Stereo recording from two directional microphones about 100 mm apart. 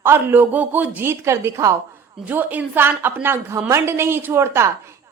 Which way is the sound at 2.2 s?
15° right (ahead or behind).